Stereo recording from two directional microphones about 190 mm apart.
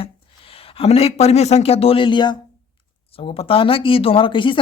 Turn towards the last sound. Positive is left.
turn(degrees=25)  # may be behind; listen again after turning